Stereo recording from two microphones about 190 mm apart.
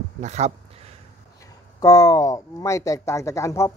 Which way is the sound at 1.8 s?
20° left (ahead or behind).